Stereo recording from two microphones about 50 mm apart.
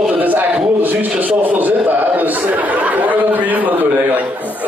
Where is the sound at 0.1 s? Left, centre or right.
Right.